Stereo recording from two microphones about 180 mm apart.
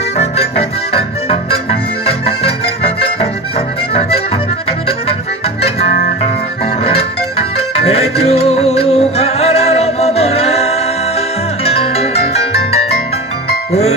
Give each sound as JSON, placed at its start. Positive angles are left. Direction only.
{"t": 0.2, "sound": "organ", "side_deg": 35}
{"t": 4.6, "sound": "accordion", "side_deg": 30}
{"t": 5.6, "sound": "music", "side_deg": 35}